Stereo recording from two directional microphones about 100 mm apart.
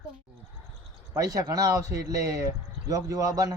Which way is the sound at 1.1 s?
35° right (ahead or behind).